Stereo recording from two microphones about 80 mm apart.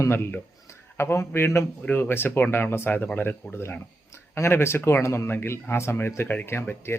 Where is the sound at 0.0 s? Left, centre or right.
Left.